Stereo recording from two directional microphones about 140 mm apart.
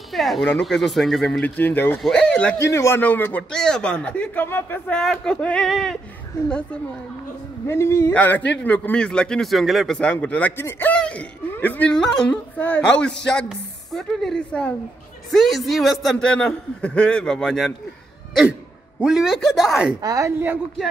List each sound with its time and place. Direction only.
0.1 s a man's voice: centre (ahead or behind)
1.4 s a man's voice: 15° left (ahead or behind)
2.6 s a man's voice: 20° left (ahead or behind); by 5.9 s centre (ahead or behind)
7.6 s a man's voice: 20° left (ahead or behind); by 20.0 s 5° right (ahead or behind)
20.0 s a woman's voice: 25° right (ahead or behind)